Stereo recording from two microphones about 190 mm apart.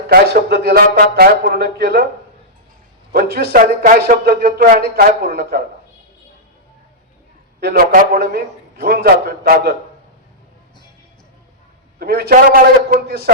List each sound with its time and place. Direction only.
0.1 s a man's voice: 55° right (ahead or behind)
3.1 s a man's voice: 55° right (ahead or behind)
7.6 s a man's voice: 50° right (ahead or behind)
11.9 s a man's voice: 55° right (ahead or behind)